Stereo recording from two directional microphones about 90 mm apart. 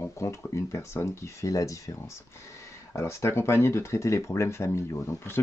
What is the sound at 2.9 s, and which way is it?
Speech, 30° left (ahead or behind).